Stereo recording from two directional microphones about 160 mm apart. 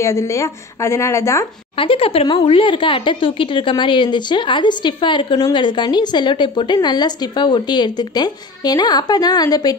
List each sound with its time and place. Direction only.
0.0 s speech: 15° left (ahead or behind)
1.8 s speech: 35° left (ahead or behind)